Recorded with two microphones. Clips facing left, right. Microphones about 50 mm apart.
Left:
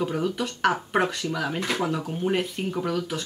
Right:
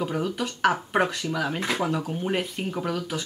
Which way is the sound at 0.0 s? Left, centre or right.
Centre.